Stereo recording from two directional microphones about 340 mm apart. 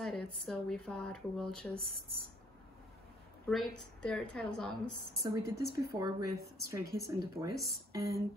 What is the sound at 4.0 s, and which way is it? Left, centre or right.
Speech, centre.